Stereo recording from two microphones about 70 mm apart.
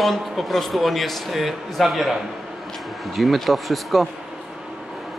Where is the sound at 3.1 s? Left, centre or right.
Centre.